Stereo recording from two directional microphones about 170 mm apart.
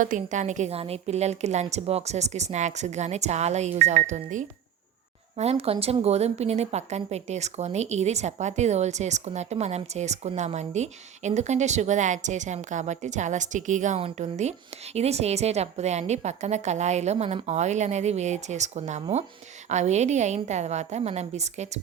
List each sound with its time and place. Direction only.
0.0 s a woman's voice: 50° right (ahead or behind)